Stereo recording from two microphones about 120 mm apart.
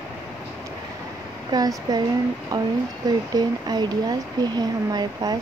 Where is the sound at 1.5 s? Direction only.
35° right (ahead or behind).